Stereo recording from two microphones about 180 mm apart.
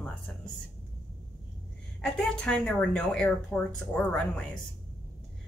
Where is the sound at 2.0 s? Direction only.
5° left (ahead or behind).